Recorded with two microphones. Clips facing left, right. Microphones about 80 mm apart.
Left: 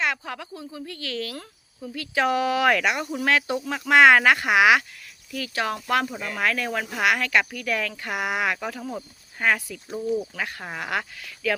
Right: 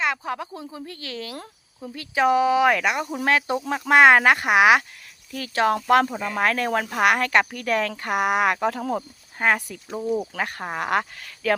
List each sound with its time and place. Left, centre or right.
0.0 s speech: right
6.1 s speech: right
8.7 s speech: right
9.4 s speech: right
10.3 s speech: right